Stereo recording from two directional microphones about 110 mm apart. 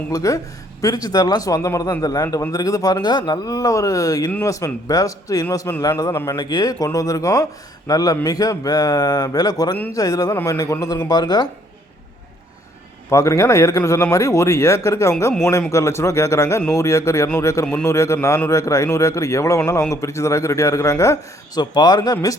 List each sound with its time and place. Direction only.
0.1 s speech: 30° left (ahead or behind)
13.1 s a man's voice: 30° left (ahead or behind)
21.6 s speech: 40° left (ahead or behind)